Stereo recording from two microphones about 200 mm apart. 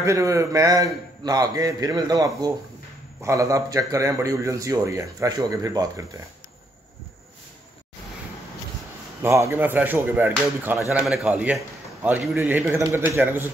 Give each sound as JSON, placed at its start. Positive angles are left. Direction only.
{"t": 0.0, "sound": "a man's voice", "side_deg": -15}
{"t": 9.2, "sound": "a man's voice", "side_deg": -15}